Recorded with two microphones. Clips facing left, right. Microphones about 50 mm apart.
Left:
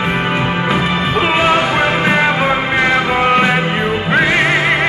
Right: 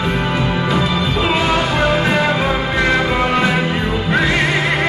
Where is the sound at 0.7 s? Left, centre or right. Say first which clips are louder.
Left 2 dB; left.